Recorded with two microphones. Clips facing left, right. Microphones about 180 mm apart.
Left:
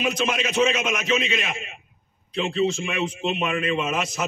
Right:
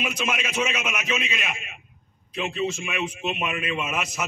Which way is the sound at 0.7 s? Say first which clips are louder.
Left 5 dB; 30° left (ahead or behind).